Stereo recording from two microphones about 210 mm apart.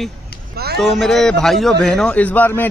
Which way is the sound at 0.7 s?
Centre (ahead or behind).